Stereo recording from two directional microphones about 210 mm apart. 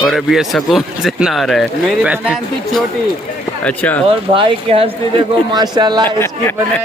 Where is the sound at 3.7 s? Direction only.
5° left (ahead or behind).